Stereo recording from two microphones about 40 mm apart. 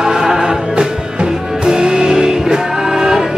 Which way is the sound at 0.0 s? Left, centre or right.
Centre.